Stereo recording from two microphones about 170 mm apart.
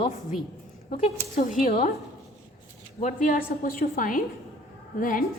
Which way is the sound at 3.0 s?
50° left (ahead or behind).